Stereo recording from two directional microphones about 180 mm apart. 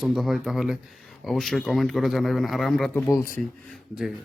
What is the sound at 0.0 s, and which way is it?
Speech, centre (ahead or behind).